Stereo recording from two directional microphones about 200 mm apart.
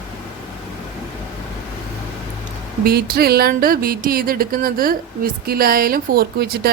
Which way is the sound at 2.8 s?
50° right (ahead or behind).